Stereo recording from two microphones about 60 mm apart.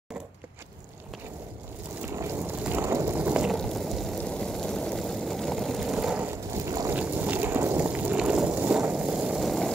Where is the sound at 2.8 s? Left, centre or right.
Right.